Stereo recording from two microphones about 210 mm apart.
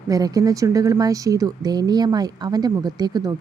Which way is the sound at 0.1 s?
15° right (ahead or behind).